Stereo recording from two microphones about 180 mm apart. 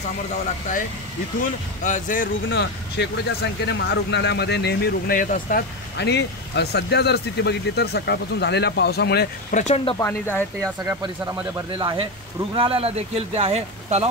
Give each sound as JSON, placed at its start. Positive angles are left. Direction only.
{"t": 1.9, "sound": "speech", "side_deg": 45}
{"t": 2.5, "sound": "speech", "side_deg": 70}
{"t": 9.5, "sound": "speech", "side_deg": 45}
{"t": 9.9, "sound": "speech", "side_deg": 15}
{"t": 10.6, "sound": "speech", "side_deg": -20}